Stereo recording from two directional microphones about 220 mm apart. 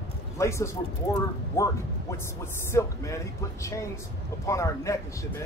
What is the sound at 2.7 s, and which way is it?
Speech, 15° left (ahead or behind).